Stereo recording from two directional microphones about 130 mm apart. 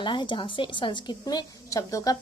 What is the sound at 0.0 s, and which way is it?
A woman's voice, 35° left (ahead or behind).